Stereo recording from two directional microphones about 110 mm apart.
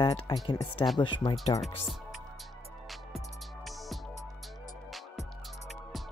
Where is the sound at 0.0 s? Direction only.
40° left (ahead or behind).